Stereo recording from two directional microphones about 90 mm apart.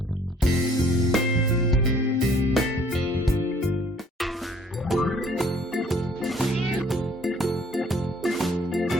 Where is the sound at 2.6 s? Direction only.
Centre (ahead or behind).